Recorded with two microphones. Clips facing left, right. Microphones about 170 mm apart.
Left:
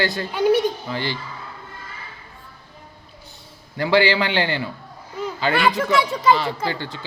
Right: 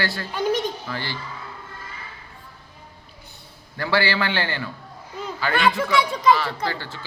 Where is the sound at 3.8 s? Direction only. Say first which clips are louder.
Left 5 dB; 15° left (ahead or behind).